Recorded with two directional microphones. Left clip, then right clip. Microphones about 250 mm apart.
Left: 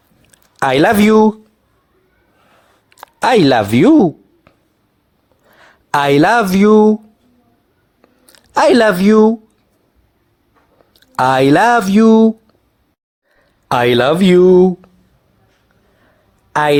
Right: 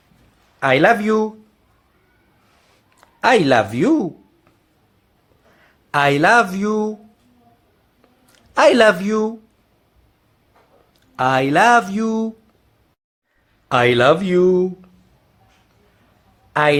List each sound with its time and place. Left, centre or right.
0.6 s speech: left
2.9 s a sound: left
5.9 s speech: left
8.3 s speech: left
11.2 s speech: left
13.7 s speech: left